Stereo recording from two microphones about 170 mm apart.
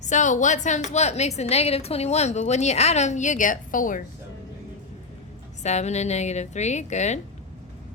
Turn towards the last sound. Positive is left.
turn(degrees=45)  # may be behind; listen again after turning